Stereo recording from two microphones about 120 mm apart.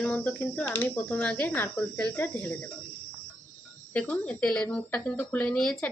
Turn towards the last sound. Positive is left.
turn(degrees=5)  # may be behind; listen again after turning